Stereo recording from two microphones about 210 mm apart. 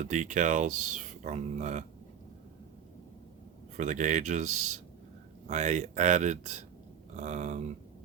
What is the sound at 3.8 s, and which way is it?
Speech, 35° right (ahead or behind).